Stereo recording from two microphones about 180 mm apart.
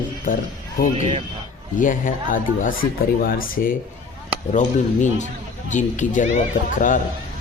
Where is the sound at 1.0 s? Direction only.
40° right (ahead or behind).